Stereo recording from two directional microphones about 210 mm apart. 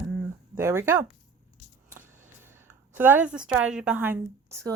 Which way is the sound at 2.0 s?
10° right (ahead or behind).